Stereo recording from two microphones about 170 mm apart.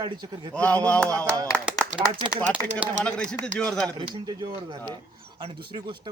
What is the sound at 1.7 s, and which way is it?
Speech, 5° right (ahead or behind).